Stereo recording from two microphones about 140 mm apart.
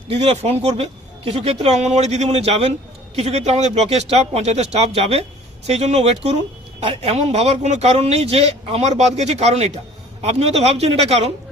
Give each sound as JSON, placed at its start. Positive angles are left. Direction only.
{"t": 0.1, "sound": "speech", "side_deg": -45}